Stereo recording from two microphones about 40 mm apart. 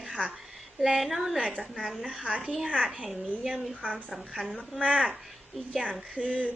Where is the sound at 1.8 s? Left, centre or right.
Centre.